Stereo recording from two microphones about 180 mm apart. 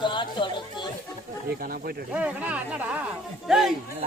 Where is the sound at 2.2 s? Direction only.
5° right (ahead or behind).